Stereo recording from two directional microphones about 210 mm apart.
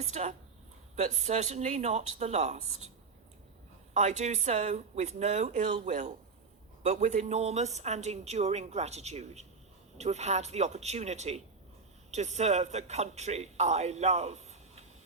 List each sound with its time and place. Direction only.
0.0 s speech: 30° right (ahead or behind)
3.9 s speech: 35° right (ahead or behind)